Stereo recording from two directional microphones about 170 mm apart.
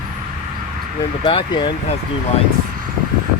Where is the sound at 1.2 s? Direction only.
25° left (ahead or behind).